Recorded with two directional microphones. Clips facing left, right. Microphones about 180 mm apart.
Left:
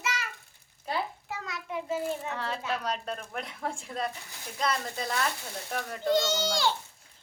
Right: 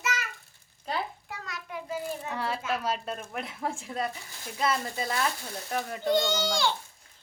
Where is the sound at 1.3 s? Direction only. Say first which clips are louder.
Left 3 dB; 25° left (ahead or behind).